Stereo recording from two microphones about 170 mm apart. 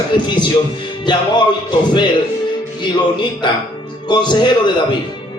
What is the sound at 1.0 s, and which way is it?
Speech, 25° left (ahead or behind).